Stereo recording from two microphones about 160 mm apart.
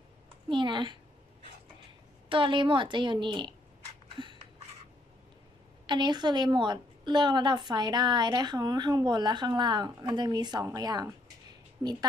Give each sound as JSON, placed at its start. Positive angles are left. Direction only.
{"t": 0.5, "sound": "a woman's voice", "side_deg": -30}
{"t": 2.2, "sound": "a woman's voice", "side_deg": -30}
{"t": 4.1, "sound": "a sound", "side_deg": -30}
{"t": 5.9, "sound": "a woman's voice", "side_deg": -30}